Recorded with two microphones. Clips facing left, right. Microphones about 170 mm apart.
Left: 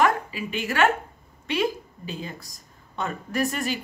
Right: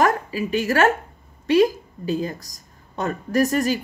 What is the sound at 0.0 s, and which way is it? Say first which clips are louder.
A woman's voice: right 3 dB; 40° right (ahead or behind).